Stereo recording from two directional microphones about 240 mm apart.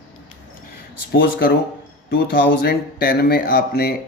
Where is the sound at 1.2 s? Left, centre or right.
Left.